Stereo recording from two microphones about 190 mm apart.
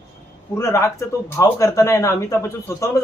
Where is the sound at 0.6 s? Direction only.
15° left (ahead or behind).